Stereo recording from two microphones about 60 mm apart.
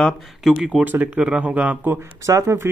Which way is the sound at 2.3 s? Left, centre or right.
Right.